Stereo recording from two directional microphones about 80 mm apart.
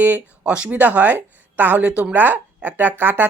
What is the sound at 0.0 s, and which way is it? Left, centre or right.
Speech, centre.